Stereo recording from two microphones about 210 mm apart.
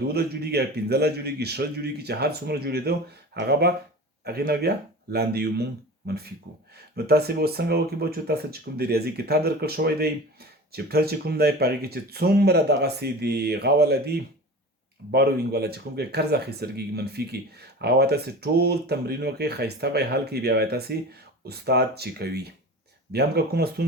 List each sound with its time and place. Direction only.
0.1 s speech: 50° right (ahead or behind)